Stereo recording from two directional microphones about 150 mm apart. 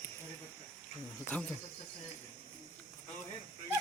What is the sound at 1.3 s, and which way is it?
Speech, 5° left (ahead or behind).